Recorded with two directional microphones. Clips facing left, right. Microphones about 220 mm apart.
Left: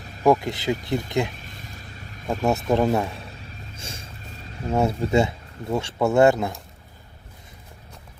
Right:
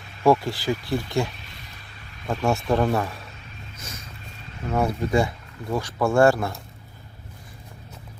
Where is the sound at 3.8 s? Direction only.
30° left (ahead or behind).